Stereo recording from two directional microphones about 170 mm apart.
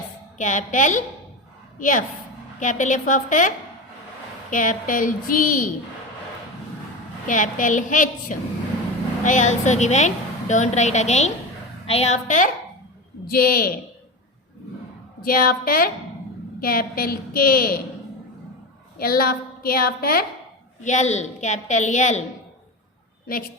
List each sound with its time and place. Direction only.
0.3 s a woman's voice: 45° left (ahead or behind)
4.5 s a woman's voice: 50° left (ahead or behind)
7.3 s a woman's voice: 50° left (ahead or behind)
13.2 s a woman's voice: 60° left (ahead or behind)
15.2 s a woman's voice: 60° left (ahead or behind)
18.9 s a woman's voice: 60° left (ahead or behind)
20.8 s a woman's voice: 45° left (ahead or behind)